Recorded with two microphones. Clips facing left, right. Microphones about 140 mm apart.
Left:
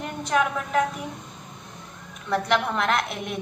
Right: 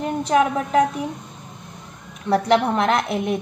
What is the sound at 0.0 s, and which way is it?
Speech, 35° right (ahead or behind).